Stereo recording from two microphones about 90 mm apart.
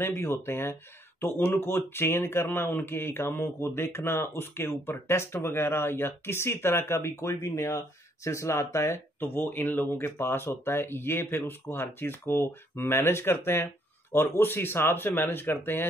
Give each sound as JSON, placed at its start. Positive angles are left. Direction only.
{"t": 0.0, "sound": "speech", "side_deg": 30}